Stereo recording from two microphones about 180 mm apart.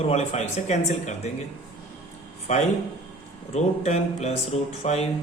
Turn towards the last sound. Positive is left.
turn(degrees=35)  # may be behind; listen again after turning